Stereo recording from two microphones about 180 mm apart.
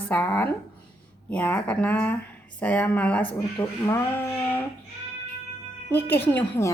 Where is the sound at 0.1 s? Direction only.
10° left (ahead or behind).